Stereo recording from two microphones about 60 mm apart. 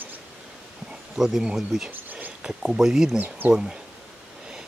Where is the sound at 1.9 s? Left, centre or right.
Right.